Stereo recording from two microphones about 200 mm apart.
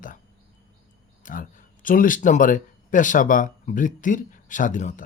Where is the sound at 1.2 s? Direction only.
40° left (ahead or behind).